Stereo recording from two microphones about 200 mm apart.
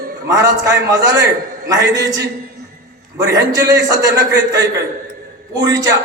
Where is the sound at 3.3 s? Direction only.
20° right (ahead or behind).